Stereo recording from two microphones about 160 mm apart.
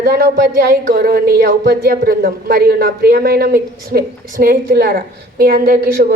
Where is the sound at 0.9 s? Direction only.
70° right (ahead or behind).